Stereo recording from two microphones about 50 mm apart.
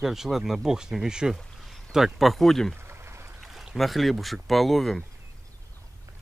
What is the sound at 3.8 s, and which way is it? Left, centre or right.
Speech, centre.